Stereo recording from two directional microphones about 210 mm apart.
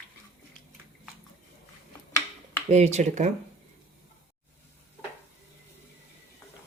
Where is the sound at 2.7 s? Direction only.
30° right (ahead or behind).